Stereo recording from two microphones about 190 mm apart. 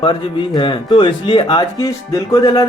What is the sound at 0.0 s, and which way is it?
Speech, 25° left (ahead or behind).